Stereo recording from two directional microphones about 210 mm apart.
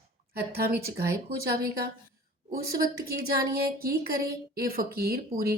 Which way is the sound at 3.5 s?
45° right (ahead or behind).